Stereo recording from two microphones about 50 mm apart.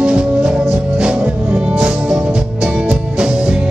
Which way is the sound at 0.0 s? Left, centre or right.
Centre.